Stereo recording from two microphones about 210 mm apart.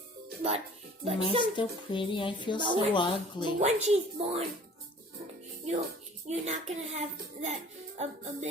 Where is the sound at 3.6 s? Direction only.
30° right (ahead or behind).